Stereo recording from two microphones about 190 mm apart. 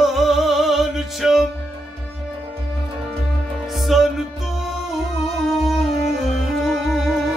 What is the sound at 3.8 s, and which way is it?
Music, centre (ahead or behind).